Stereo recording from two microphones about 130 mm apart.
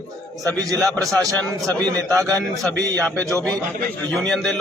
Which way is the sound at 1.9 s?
10° left (ahead or behind).